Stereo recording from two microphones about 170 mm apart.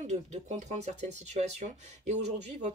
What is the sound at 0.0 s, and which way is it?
Speech, 40° right (ahead or behind).